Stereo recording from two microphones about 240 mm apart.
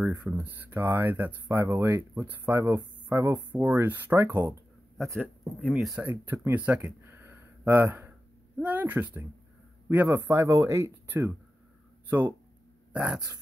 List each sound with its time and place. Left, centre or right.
0.0 s speech: centre